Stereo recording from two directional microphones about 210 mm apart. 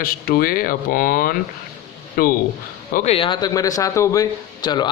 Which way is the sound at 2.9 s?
30° left (ahead or behind).